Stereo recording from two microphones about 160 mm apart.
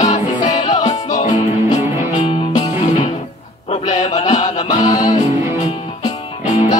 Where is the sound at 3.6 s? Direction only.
45° left (ahead or behind).